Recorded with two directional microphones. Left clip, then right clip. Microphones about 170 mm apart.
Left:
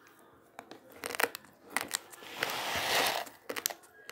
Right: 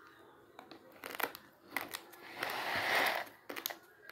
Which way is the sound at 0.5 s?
40° left (ahead or behind).